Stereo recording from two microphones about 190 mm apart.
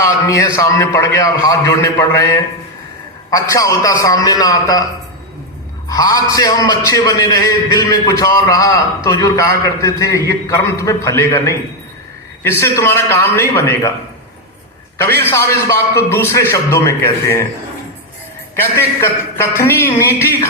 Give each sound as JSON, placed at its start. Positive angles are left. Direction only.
{"t": 0.0, "sound": "a man's voice", "side_deg": 15}
{"t": 5.9, "sound": "a man's voice", "side_deg": 20}
{"t": 15.0, "sound": "a man's voice", "side_deg": 10}
{"t": 18.5, "sound": "a man's voice", "side_deg": 10}